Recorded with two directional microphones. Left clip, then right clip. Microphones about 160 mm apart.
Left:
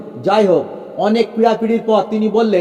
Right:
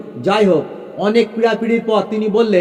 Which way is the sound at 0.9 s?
25° right (ahead or behind).